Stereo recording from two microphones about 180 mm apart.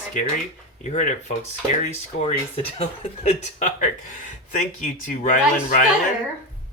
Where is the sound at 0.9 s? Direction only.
40° left (ahead or behind).